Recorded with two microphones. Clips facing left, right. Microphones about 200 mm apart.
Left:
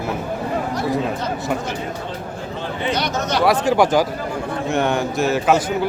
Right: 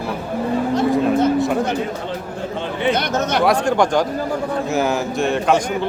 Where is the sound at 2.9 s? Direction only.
55° right (ahead or behind).